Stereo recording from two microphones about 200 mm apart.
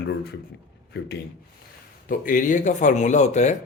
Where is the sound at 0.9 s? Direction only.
55° left (ahead or behind).